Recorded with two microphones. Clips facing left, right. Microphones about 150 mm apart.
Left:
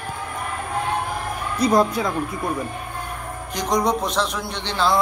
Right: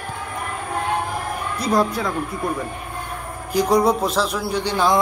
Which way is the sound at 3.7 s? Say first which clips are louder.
Right 2 dB; 5° right (ahead or behind).